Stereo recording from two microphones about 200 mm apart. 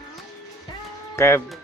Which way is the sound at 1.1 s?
15° left (ahead or behind).